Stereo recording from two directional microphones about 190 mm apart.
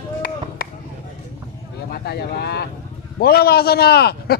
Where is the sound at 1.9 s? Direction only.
55° left (ahead or behind).